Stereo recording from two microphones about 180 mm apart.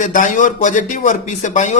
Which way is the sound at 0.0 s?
45° left (ahead or behind).